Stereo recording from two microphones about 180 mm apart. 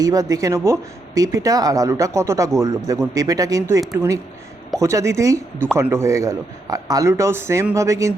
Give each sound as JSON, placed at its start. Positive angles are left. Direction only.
{"t": 0.0, "sound": "a man's voice", "side_deg": -20}